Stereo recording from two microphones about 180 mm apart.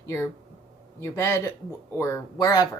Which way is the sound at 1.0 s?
15° left (ahead or behind).